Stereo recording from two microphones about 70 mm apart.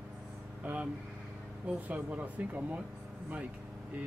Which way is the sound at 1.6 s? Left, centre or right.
Right.